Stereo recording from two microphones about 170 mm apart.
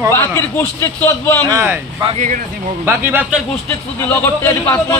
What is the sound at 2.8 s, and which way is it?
Speech, 15° right (ahead or behind).